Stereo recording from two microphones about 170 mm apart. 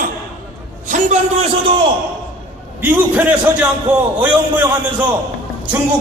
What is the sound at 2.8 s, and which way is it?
Speech, 10° right (ahead or behind).